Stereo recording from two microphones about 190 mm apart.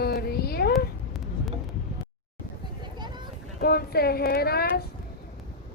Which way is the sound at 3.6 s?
55° left (ahead or behind).